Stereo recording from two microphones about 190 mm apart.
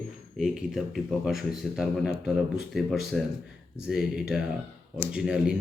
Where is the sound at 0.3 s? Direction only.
Centre (ahead or behind).